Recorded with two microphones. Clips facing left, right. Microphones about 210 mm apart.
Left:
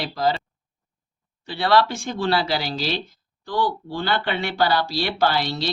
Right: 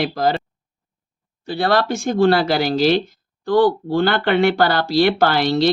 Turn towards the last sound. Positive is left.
turn(degrees=-55)  # may be behind; listen again after turning